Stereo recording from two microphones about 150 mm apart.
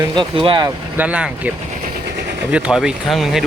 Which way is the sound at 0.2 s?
30° right (ahead or behind).